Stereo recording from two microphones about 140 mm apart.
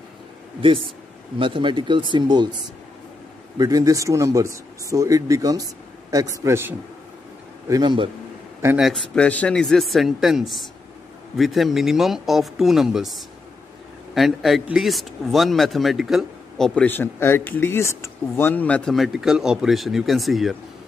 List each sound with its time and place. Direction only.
0.6 s speech: 35° right (ahead or behind)
3.5 s a man's voice: 25° right (ahead or behind)
7.6 s speech: 30° right (ahead or behind)
8.7 s speech: centre (ahead or behind)